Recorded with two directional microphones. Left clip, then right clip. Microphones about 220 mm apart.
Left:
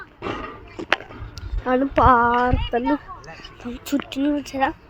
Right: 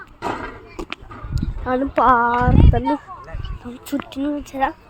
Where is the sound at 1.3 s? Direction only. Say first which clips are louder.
Left 1 dB; 10° left (ahead or behind).